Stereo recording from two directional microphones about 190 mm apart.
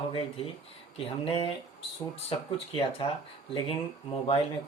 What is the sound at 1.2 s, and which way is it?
Speech, 25° left (ahead or behind).